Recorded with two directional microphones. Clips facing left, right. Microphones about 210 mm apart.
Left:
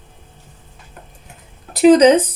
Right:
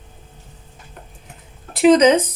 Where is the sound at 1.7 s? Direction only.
35° left (ahead or behind).